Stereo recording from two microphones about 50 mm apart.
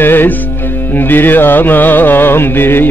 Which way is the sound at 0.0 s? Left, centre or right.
Left.